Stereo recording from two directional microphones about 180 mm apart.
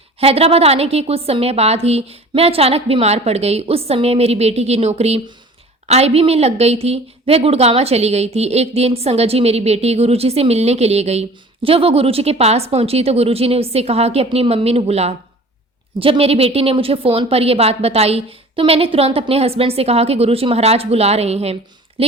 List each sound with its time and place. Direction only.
0.2 s a woman's voice: 35° right (ahead or behind)